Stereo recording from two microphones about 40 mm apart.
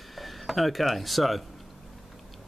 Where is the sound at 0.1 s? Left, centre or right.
Centre.